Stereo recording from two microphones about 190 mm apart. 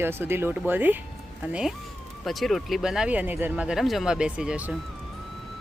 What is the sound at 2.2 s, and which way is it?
Speech, centre (ahead or behind).